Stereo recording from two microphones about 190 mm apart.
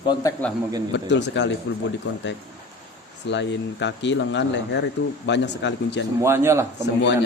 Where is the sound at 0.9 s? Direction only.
65° left (ahead or behind).